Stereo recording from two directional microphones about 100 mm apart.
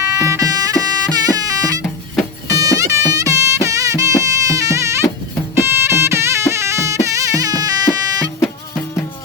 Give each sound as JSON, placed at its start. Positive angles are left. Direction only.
{"t": 0.0, "sound": "music", "side_deg": -30}